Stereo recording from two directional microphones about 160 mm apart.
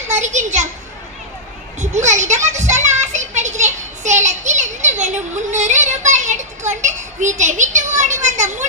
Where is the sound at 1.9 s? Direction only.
45° right (ahead or behind).